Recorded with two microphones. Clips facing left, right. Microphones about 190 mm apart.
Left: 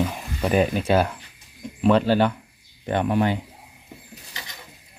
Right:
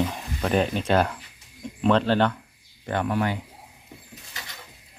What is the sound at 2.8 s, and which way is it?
Speech, 20° left (ahead or behind).